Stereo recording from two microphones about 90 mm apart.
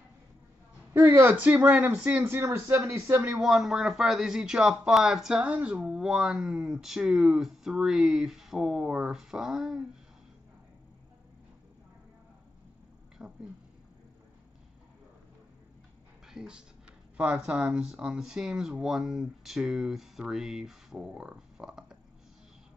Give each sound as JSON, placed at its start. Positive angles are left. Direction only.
{"t": 0.9, "sound": "a woman's voice", "side_deg": -35}
{"t": 1.2, "sound": "speech", "side_deg": -20}
{"t": 3.3, "sound": "speech", "side_deg": -5}
{"t": 5.8, "sound": "speech", "side_deg": -5}
{"t": 13.2, "sound": "a sound", "side_deg": -10}
{"t": 16.3, "sound": "speech", "side_deg": -10}